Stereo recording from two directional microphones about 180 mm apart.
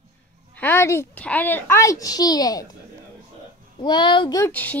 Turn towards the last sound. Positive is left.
turn(degrees=10)  # may be behind; listen again after turning